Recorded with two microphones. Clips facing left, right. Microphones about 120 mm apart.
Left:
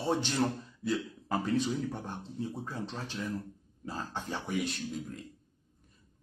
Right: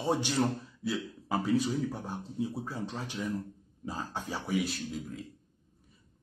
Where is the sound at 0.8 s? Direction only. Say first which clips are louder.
Left 3 dB; centre (ahead or behind).